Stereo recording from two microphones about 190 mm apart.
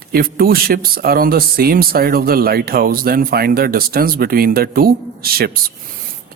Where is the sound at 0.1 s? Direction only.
50° right (ahead or behind).